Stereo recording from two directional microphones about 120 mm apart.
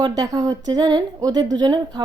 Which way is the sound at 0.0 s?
35° right (ahead or behind).